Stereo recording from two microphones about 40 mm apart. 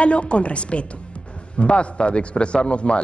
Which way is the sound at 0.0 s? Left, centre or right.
Left.